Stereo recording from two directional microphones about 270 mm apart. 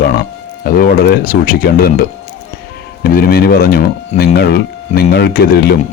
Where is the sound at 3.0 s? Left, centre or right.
Left.